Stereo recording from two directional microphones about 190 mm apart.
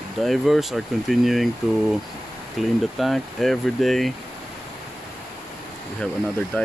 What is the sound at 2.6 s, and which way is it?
Speech, centre (ahead or behind).